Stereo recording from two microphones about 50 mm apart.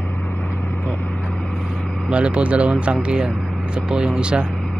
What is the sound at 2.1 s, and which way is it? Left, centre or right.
Speech, right.